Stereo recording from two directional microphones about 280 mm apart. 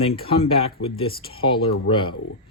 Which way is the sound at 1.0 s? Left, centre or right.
Centre.